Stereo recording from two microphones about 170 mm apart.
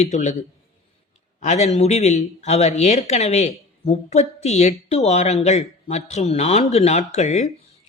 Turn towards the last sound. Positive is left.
turn(degrees=40)  # may be behind; listen again after turning